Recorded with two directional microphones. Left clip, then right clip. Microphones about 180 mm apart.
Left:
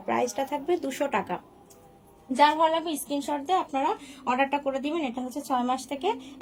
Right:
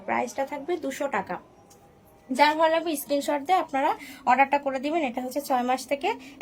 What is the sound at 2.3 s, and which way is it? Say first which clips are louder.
A woman's voice: right 1 dB; 20° right (ahead or behind).